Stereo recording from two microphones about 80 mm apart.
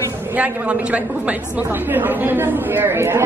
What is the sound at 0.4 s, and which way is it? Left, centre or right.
A woman's voice, centre.